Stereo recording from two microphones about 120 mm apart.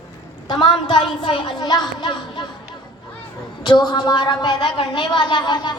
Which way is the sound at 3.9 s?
40° left (ahead or behind).